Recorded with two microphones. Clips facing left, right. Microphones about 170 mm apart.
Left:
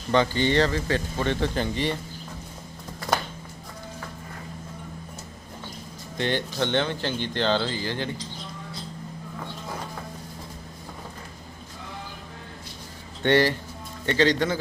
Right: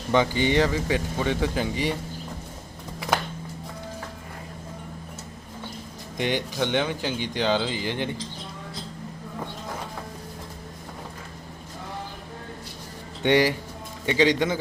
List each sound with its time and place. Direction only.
0.1 s speech: 15° right (ahead or behind)
6.1 s speech: 15° right (ahead or behind)
13.2 s speech: 15° right (ahead or behind)